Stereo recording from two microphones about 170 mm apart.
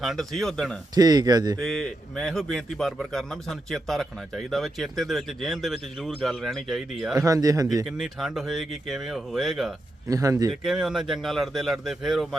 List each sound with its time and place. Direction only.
0.0 s speech: centre (ahead or behind)
0.9 s speech: 20° right (ahead or behind)
1.5 s speech: 5° left (ahead or behind)
7.2 s speech: 20° right (ahead or behind)
7.9 s speech: 5° right (ahead or behind)
10.1 s speech: 20° right (ahead or behind)
10.5 s speech: centre (ahead or behind)